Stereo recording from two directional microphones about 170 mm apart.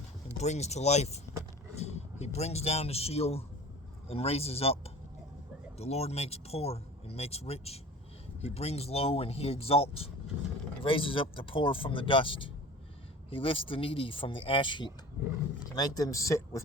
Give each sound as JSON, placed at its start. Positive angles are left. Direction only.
{"t": 0.3, "sound": "speech", "side_deg": 40}